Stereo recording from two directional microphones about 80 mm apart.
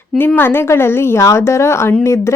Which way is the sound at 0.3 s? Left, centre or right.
Left.